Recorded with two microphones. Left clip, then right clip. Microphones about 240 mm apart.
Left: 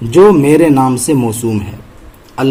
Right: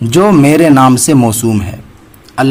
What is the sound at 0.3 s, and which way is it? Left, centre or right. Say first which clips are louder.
A man's voice: even; right.